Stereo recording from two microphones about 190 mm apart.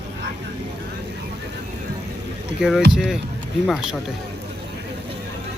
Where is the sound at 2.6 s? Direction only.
Centre (ahead or behind).